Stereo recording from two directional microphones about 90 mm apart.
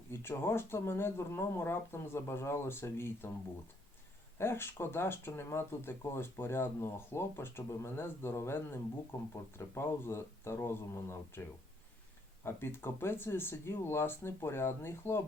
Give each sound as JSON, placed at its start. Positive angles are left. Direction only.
{"t": 0.1, "sound": "speech", "side_deg": 25}
{"t": 4.4, "sound": "speech", "side_deg": 25}